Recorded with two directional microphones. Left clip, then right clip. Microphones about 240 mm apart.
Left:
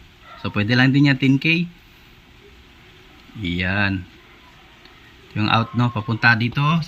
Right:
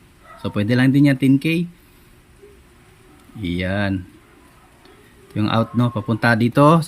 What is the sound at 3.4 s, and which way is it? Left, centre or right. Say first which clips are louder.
Speech: left 2 dB; centre.